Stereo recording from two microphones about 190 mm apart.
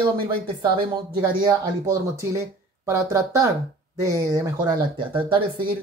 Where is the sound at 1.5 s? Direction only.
15° right (ahead or behind).